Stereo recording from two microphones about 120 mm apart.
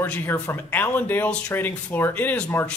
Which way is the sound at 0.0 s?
15° left (ahead or behind).